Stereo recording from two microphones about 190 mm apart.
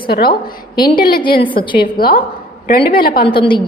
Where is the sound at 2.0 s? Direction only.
50° left (ahead or behind).